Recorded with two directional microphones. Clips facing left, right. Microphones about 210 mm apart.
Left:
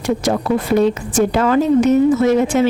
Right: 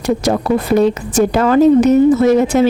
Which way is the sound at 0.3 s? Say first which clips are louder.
Right 2 dB; 40° right (ahead or behind).